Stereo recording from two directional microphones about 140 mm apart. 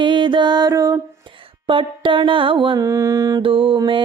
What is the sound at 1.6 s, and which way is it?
Music, 40° right (ahead or behind).